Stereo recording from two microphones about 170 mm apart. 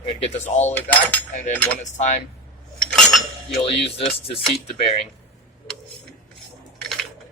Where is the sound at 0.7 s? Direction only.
10° left (ahead or behind).